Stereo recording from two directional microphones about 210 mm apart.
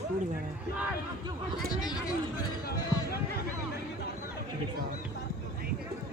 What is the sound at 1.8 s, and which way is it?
Speech, 20° left (ahead or behind).